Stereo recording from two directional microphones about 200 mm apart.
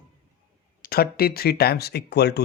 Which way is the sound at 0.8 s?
50° left (ahead or behind).